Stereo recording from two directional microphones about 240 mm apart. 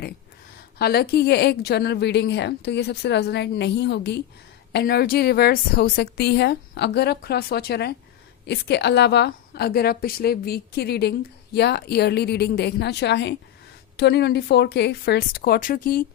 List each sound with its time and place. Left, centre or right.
0.8 s a woman's voice: left